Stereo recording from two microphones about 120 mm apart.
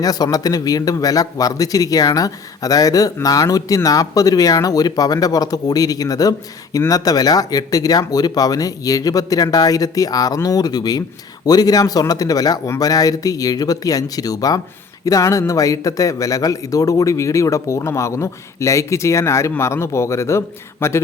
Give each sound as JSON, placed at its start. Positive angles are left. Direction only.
{"t": 0.0, "sound": "speech", "side_deg": 30}